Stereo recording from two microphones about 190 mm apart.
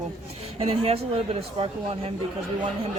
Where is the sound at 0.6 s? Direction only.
30° right (ahead or behind).